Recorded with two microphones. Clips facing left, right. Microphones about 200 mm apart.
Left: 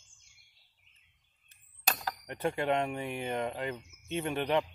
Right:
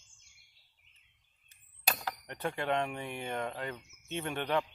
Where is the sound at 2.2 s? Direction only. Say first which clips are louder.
Left 5 dB; 10° left (ahead or behind).